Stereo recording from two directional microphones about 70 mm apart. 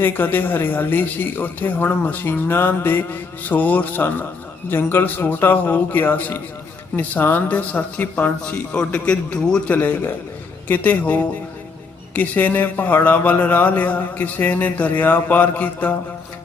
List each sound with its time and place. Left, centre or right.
0.0 s speech: left